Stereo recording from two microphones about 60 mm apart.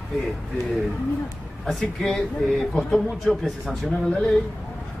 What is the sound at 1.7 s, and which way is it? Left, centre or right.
A man's voice, centre.